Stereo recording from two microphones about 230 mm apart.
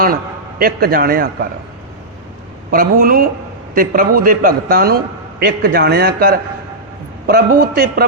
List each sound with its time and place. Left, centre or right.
0.6 s a man's voice: right
2.7 s a man's voice: right